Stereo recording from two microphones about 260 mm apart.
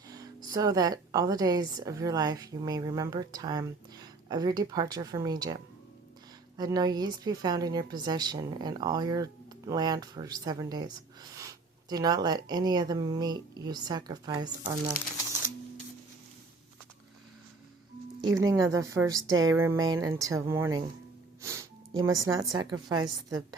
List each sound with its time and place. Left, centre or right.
0.1 s a woman's voice: centre
18.3 s a woman's voice: centre
19.3 s speech: right
19.8 s a woman's voice: centre
21.4 s music: centre
22.5 s a woman's voice: centre